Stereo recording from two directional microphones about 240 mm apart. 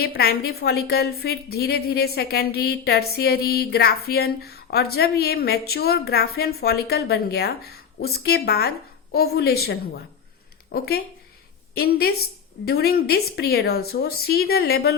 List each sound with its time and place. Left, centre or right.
0.0 s a woman's voice: left